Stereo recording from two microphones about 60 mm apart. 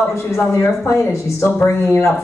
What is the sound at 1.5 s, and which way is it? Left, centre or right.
Speech, left.